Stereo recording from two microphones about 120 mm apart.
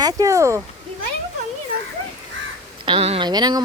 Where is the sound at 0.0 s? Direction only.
25° right (ahead or behind).